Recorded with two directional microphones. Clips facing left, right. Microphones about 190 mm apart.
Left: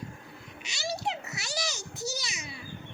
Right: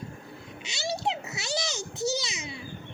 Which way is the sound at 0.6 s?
25° right (ahead or behind).